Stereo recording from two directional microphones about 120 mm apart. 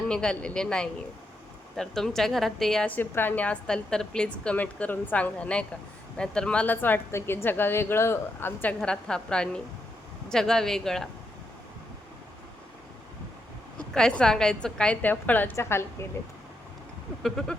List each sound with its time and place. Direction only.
0.1 s a woman's voice: 5° left (ahead or behind)
8.8 s a woman's voice: 5° left (ahead or behind)
13.7 s a woman's voice: 5° left (ahead or behind)
17.2 s speech: 5° left (ahead or behind)